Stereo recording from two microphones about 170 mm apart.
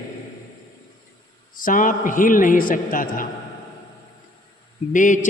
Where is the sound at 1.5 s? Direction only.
55° left (ahead or behind).